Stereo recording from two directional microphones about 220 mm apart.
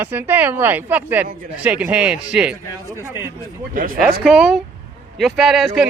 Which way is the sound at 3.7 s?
40° right (ahead or behind).